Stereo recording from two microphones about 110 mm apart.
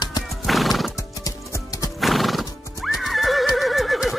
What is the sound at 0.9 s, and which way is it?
Clip-clop, 30° left (ahead or behind).